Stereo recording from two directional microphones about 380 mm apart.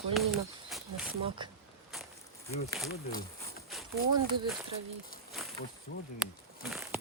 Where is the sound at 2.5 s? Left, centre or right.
Centre.